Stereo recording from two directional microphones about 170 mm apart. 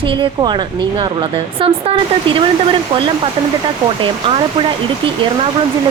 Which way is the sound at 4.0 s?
30° right (ahead or behind).